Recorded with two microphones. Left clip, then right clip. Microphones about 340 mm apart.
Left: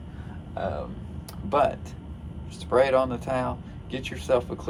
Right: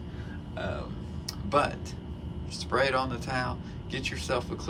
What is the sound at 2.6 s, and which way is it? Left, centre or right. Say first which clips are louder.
Speech: left 6 dB; centre.